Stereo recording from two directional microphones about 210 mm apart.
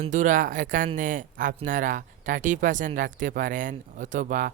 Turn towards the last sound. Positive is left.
turn(degrees=-40)  # may be behind; listen again after turning